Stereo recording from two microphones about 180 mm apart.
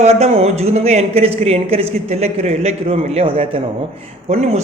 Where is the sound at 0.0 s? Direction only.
35° right (ahead or behind).